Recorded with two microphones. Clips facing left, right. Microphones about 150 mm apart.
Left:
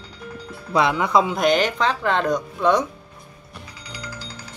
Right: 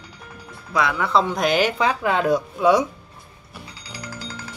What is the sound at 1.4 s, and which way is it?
Speech, 5° right (ahead or behind).